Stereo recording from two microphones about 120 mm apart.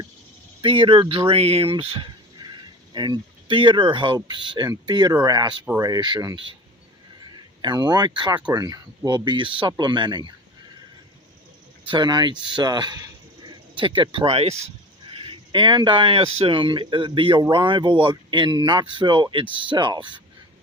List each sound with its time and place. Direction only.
0.6 s speech: 45° right (ahead or behind)
2.4 s speech: 35° right (ahead or behind)
11.9 s speech: 40° right (ahead or behind); by 14.5 s 55° right (ahead or behind)
15.1 s speech: 45° right (ahead or behind)